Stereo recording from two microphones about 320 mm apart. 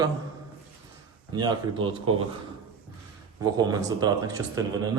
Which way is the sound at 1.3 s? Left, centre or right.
Centre.